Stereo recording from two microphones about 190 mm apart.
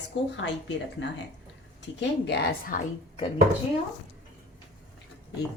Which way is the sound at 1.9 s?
65° left (ahead or behind).